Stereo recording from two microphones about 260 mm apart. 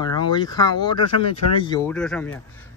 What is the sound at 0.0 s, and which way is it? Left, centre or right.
Speech, centre.